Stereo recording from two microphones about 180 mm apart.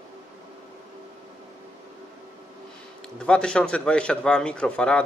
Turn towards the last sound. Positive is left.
turn(degrees=5)  # may be behind; listen again after turning